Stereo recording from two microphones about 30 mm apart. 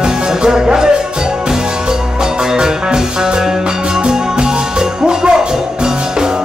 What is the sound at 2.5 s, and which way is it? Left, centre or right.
Music, right.